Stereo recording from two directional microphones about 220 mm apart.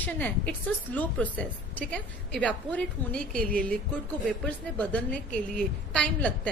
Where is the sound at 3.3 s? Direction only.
40° right (ahead or behind).